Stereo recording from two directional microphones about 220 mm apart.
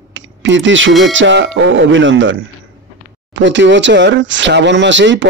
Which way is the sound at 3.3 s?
55° right (ahead or behind).